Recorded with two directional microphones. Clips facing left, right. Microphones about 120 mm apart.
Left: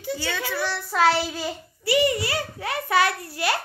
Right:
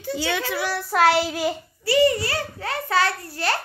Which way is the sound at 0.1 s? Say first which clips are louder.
Right 3 dB; 15° right (ahead or behind).